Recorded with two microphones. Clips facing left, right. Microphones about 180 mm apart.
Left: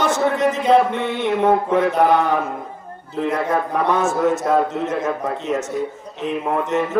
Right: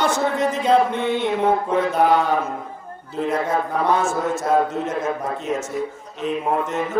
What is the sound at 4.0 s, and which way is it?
A man's voice, 20° left (ahead or behind).